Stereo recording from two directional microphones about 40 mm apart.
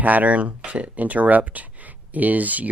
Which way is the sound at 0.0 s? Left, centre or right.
Right.